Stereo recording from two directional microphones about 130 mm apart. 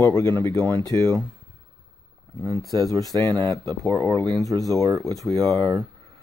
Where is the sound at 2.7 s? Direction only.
30° right (ahead or behind).